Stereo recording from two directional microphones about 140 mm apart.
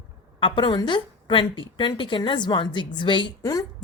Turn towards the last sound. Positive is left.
turn(degrees=25)  # may be behind; listen again after turning